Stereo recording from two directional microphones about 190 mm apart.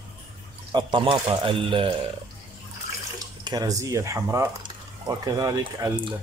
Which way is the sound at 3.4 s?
20° right (ahead or behind).